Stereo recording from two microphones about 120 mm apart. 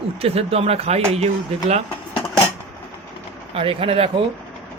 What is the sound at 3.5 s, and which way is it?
Speech, 50° right (ahead or behind).